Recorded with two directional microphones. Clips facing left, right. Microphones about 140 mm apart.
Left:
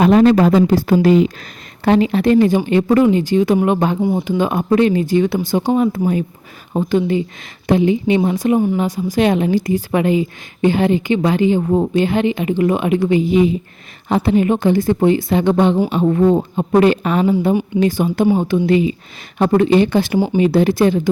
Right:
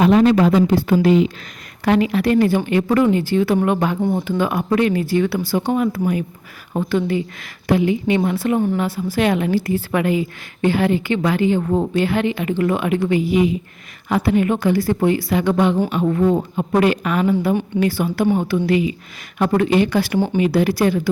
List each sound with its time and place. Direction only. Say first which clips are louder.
0.0 s speech: left 2 dB; 40° left (ahead or behind)
1.8 s a woman's voice: left 3 dB; 30° left (ahead or behind)